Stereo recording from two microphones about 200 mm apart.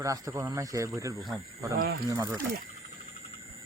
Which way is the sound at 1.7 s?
50° right (ahead or behind).